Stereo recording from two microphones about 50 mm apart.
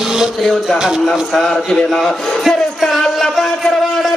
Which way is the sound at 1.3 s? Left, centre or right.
Centre.